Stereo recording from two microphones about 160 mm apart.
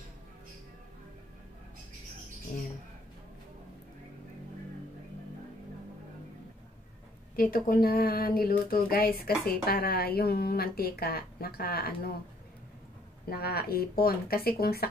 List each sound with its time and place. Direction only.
7.3 s a woman's voice: 65° left (ahead or behind)
13.3 s a woman's voice: 70° left (ahead or behind)